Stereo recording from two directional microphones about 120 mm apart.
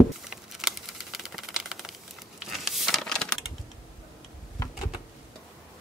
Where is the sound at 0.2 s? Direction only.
5° right (ahead or behind).